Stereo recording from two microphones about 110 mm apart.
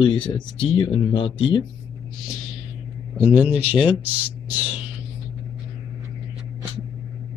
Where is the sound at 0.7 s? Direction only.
45° left (ahead or behind).